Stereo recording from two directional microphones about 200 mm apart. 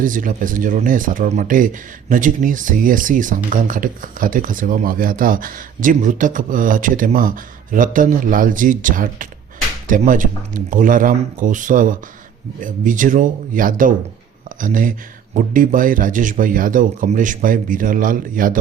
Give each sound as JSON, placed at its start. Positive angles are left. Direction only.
{"t": 0.0, "sound": "speech", "side_deg": -40}